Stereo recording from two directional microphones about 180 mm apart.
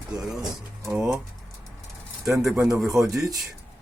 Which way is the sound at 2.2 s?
Centre (ahead or behind).